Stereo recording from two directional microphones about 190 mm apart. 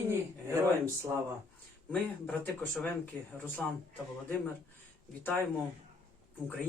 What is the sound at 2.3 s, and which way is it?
Speech, 5° left (ahead or behind).